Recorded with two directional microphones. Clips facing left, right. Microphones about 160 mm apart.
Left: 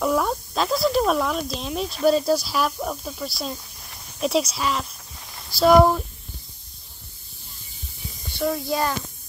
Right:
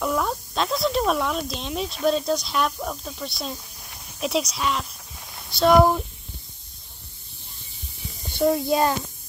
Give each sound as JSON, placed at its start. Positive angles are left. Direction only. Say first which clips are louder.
{"t": 0.0, "sound": "speech", "louder": "left 3 dB", "side_deg": 0}
{"t": 8.4, "sound": "a child's voice", "louder": "right 4 dB", "side_deg": -20}